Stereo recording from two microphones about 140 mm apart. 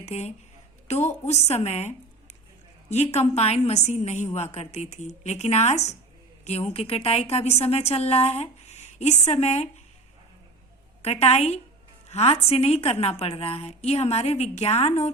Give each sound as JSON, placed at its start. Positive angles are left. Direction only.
{"t": 0.0, "sound": "a woman's voice", "side_deg": 50}
{"t": 2.9, "sound": "a woman's voice", "side_deg": 55}
{"t": 11.0, "sound": "a woman's voice", "side_deg": 50}